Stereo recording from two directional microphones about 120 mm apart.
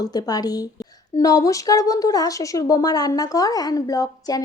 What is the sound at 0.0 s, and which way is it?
A woman's voice, 35° left (ahead or behind).